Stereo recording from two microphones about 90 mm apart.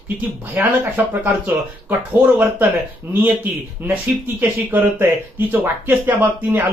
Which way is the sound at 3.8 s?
20° right (ahead or behind).